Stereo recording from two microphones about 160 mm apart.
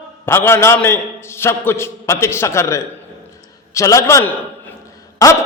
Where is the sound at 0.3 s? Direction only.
15° left (ahead or behind).